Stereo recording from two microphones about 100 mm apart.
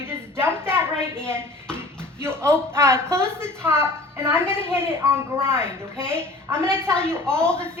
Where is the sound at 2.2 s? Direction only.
25° right (ahead or behind).